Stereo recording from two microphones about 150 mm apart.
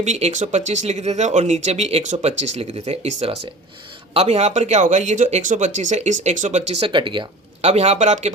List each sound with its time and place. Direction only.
0.0 s speech: 50° right (ahead or behind); by 7.7 s 35° right (ahead or behind)
7.7 s speech: 45° right (ahead or behind)